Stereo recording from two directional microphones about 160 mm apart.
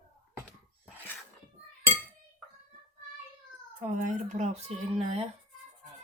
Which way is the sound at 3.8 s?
50° right (ahead or behind).